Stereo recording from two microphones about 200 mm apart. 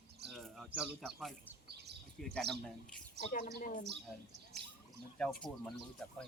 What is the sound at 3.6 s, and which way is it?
Speech, 45° left (ahead or behind).